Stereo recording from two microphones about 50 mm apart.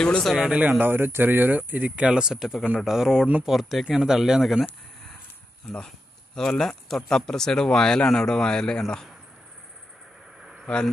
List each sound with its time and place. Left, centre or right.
0.5 s speech: right
0.7 s speech: right
2.0 s speech: centre
5.9 s a sound: centre
6.9 s speech: centre
10.7 s speech: centre